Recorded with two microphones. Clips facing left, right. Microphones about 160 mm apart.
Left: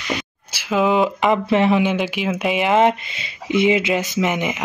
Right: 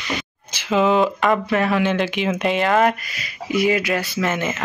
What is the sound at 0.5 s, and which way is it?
Speech, 10° left (ahead or behind).